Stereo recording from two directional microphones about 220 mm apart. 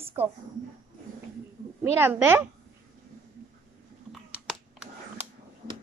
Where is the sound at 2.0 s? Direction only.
10° right (ahead or behind).